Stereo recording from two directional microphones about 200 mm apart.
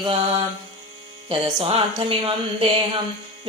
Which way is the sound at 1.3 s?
25° right (ahead or behind).